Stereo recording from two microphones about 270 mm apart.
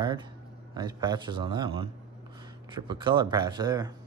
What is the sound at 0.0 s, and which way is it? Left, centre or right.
Speech, centre.